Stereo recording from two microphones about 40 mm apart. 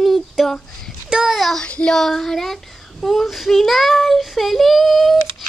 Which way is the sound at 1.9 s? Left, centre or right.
Centre.